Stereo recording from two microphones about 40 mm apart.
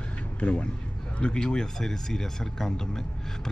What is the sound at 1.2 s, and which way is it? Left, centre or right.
A man's voice, left.